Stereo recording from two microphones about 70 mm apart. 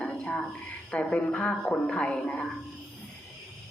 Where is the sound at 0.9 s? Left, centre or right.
Centre.